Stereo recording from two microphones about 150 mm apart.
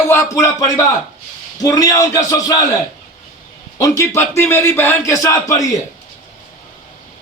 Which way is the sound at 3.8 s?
20° left (ahead or behind).